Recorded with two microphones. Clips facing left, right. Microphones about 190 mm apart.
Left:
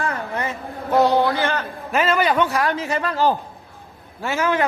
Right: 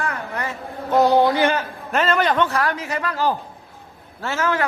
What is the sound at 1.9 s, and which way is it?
Speech, 5° left (ahead or behind).